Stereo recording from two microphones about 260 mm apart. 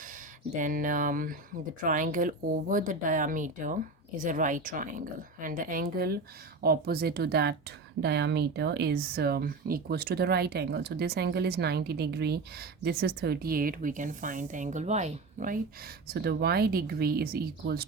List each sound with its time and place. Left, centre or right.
0.0 s speech: right